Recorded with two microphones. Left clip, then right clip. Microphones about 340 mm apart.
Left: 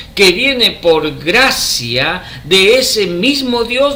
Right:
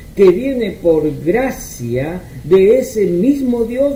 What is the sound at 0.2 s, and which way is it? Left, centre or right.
Speech, left.